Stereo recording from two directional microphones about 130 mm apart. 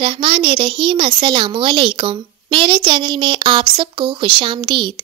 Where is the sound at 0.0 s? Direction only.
45° right (ahead or behind).